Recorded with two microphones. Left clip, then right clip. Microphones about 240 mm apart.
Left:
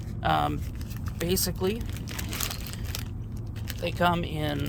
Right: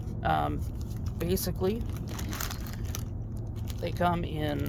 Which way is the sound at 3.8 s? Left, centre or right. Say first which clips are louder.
Left 3 dB; left.